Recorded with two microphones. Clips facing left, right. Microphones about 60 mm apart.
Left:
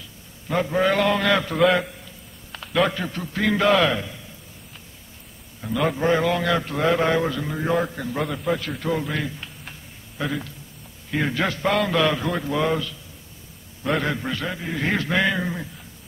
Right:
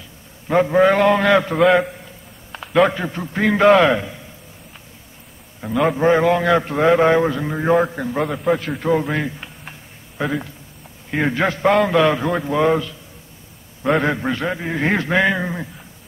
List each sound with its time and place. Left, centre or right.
0.5 s a man's voice: right
5.8 s a man's voice: right
8.2 s a man's voice: centre
8.7 s a sound: right
11.1 s a man's voice: right